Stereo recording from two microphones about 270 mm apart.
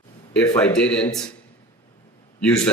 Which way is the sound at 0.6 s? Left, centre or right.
Centre.